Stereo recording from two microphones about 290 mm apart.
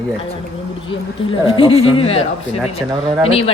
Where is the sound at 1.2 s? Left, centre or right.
Centre.